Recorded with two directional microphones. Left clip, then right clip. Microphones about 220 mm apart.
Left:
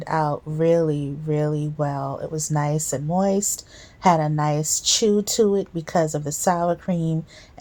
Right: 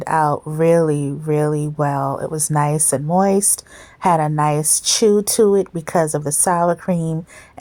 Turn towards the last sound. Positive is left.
turn(degrees=-35)  # may be behind; listen again after turning